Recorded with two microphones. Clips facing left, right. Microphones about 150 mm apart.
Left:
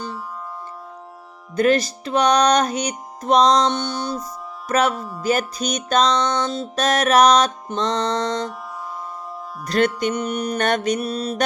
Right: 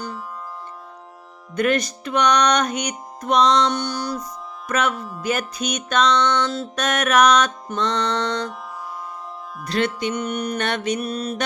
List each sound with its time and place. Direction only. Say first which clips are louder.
1.5 s music: left 3 dB; 30° left (ahead or behind)
3.7 s music: left 1 dB; 25° left (ahead or behind)
4.7 s music: left 3 dB; 35° left (ahead or behind)
9.6 s music: left 3 dB; 45° left (ahead or behind)